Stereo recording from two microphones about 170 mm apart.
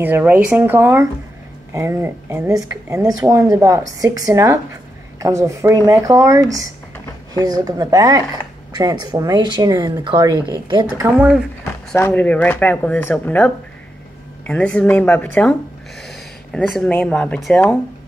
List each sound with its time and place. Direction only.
0.0 s speech: 10° right (ahead or behind); by 10.9 s 25° right (ahead or behind)
11.0 s speech: 10° right (ahead or behind)
11.6 s a sound: 15° left (ahead or behind)
12.1 s speech: 10° left (ahead or behind)